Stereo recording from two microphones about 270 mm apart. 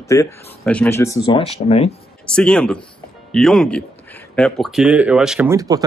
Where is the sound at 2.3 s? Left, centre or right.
Centre.